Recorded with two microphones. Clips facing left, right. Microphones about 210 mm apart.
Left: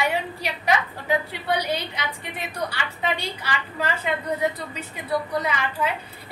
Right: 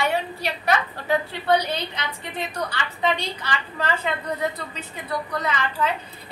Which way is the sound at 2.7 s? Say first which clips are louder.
Right 3 dB; 10° left (ahead or behind).